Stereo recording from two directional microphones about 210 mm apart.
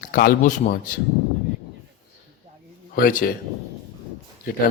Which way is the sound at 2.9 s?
40° left (ahead or behind).